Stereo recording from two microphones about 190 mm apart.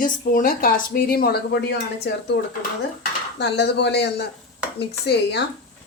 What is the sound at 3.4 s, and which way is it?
Speech, 60° left (ahead or behind).